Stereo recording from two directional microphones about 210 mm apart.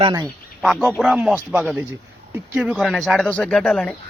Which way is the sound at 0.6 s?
Centre (ahead or behind).